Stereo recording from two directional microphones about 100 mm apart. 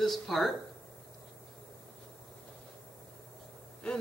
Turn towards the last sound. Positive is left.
turn(degrees=10)  # may be behind; listen again after turning